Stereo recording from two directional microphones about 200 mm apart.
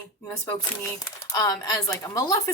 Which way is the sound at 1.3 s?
20° left (ahead or behind).